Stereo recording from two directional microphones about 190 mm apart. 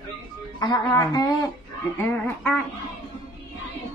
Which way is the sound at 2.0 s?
5° left (ahead or behind).